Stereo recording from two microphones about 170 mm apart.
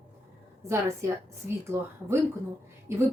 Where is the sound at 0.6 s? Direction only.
15° right (ahead or behind).